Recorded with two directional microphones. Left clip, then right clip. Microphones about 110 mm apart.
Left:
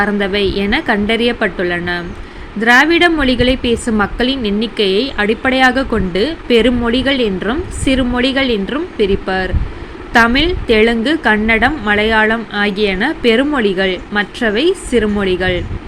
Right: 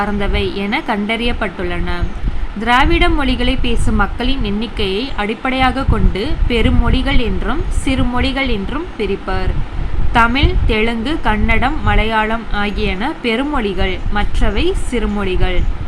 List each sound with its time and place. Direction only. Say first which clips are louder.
0.0 s a woman's voice: left 4 dB; 30° left (ahead or behind)